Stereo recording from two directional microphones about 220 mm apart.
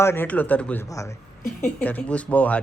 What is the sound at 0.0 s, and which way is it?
Speech, 10° left (ahead or behind).